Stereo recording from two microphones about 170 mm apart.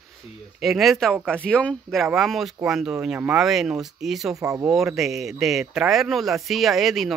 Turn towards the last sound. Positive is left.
turn(degrees=0)  # may be behind; listen again after turning